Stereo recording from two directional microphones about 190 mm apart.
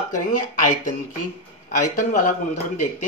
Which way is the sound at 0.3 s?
45° left (ahead or behind).